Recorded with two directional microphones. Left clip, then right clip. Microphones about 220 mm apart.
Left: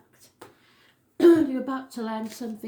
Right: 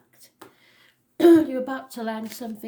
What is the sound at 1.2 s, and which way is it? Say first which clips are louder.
Speech: right 2 dB; 45° right (ahead or behind).